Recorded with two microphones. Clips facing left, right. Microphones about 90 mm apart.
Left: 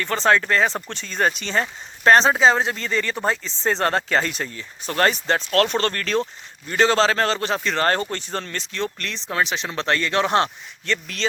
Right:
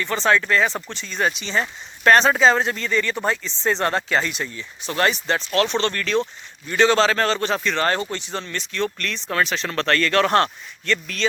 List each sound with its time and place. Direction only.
0.0 s speech: 40° left (ahead or behind)
0.9 s speech: 50° left (ahead or behind)
2.0 s speech: 25° left (ahead or behind)